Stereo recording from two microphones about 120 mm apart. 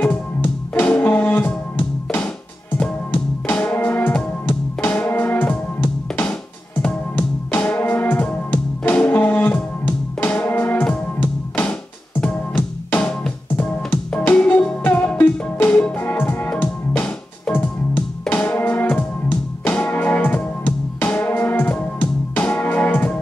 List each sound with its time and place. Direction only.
0.0 s music: 15° left (ahead or behind)
2.8 s music: 15° left (ahead or behind)